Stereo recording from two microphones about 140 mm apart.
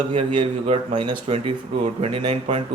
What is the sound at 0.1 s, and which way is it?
A man's voice, 40° right (ahead or behind).